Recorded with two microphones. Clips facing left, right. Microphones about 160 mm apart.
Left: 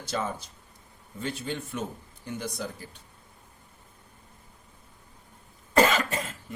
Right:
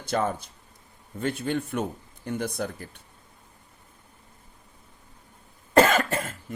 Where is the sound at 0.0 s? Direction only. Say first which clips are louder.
Right 5 dB; 55° right (ahead or behind).